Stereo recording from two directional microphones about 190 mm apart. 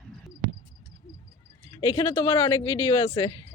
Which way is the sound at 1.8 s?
25° left (ahead or behind).